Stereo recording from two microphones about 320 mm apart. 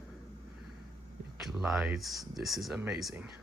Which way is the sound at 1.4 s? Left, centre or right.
Centre.